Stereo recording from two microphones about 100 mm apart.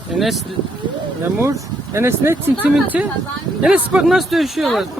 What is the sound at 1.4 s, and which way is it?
Speech, 30° right (ahead or behind).